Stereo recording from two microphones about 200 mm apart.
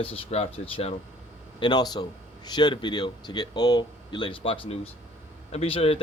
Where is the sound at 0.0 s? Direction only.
30° left (ahead or behind).